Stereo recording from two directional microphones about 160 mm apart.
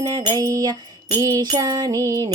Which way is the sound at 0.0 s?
25° right (ahead or behind).